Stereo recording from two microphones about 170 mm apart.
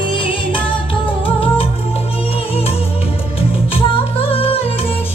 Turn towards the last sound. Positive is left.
turn(degrees=35)  # may be behind; listen again after turning